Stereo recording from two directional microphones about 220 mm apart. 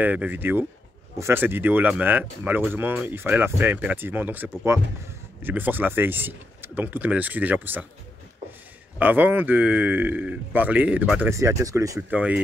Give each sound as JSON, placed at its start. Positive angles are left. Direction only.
{"t": 0.0, "sound": "speech", "side_deg": -5}
{"t": 9.0, "sound": "speech", "side_deg": -10}